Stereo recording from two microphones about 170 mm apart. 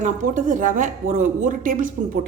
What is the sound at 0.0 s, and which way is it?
A woman's voice, 50° right (ahead or behind).